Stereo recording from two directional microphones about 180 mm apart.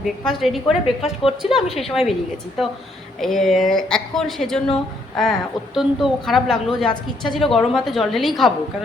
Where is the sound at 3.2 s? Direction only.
Centre (ahead or behind).